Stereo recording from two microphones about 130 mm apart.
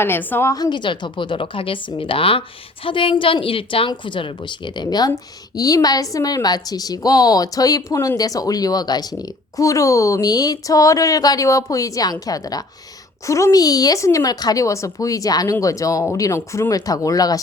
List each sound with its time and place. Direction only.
0.0 s a woman's voice: 15° left (ahead or behind)
0.5 s a woman's voice: 35° left (ahead or behind)